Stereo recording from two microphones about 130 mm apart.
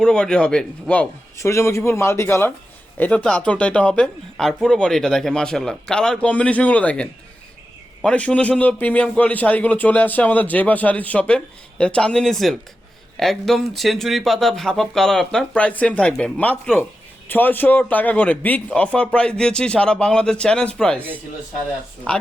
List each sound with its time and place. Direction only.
0.0 s a man's voice: 5° left (ahead or behind)
1.4 s a man's voice: 20° left (ahead or behind)